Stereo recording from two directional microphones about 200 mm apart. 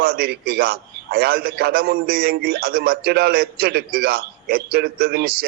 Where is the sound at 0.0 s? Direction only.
50° right (ahead or behind).